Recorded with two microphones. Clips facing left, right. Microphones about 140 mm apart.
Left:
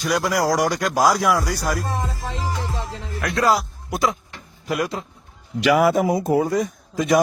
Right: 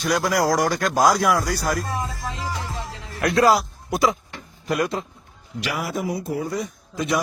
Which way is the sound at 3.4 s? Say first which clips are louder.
Right 1 dB; centre (ahead or behind).